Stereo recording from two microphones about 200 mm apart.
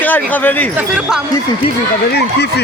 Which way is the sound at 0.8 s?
5° right (ahead or behind).